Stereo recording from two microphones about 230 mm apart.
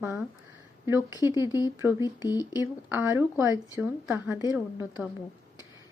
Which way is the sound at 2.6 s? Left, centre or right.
Centre.